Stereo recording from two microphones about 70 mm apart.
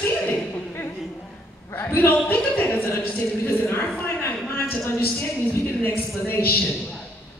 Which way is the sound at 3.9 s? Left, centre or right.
Left.